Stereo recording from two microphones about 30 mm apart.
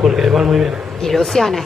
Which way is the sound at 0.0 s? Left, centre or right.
Centre.